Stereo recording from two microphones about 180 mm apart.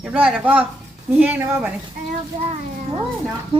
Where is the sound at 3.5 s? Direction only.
30° right (ahead or behind).